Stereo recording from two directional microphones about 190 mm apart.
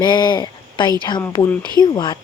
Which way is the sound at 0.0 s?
20° left (ahead or behind).